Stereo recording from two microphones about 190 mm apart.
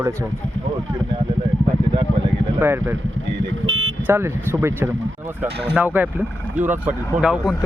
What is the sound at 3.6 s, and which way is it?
Vehicle, 85° right.